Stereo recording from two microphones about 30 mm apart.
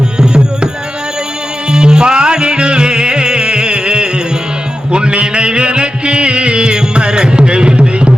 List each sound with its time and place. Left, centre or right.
0.2 s tabla: right
1.7 s music: right